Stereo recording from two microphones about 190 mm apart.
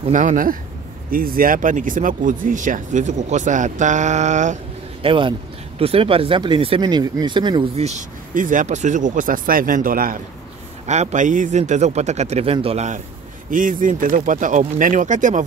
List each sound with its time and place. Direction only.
0.0 s speech: 40° right (ahead or behind)
5.0 s speech: 25° right (ahead or behind); by 10.2 s 50° right (ahead or behind)
10.9 s speech: 35° right (ahead or behind)